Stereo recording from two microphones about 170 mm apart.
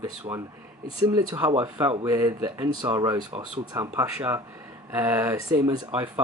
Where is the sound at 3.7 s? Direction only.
15° right (ahead or behind).